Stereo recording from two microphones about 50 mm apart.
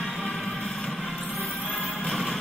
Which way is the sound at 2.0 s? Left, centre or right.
Centre.